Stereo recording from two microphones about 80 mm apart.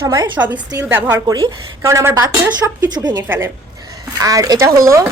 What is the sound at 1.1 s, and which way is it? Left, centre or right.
Speech, right.